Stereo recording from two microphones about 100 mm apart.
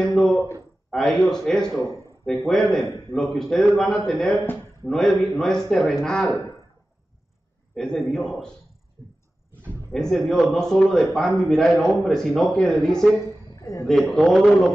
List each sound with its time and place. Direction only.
0.0 s a sound: 5° left (ahead or behind)
0.8 s a man's voice: centre (ahead or behind)
7.7 s a man's voice: 5° left (ahead or behind)
9.9 s a man's voice: centre (ahead or behind)
13.6 s a sound: 30° left (ahead or behind)
13.8 s a man's voice: centre (ahead or behind)